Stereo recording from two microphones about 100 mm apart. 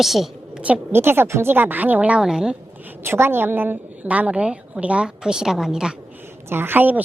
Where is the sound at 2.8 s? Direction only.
20° right (ahead or behind).